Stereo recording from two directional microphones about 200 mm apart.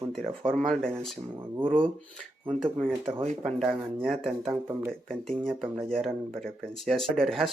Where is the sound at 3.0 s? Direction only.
30° right (ahead or behind).